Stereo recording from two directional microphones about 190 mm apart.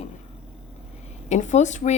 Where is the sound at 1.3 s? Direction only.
40° left (ahead or behind).